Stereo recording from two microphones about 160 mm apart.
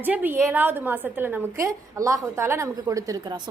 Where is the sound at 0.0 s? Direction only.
10° right (ahead or behind).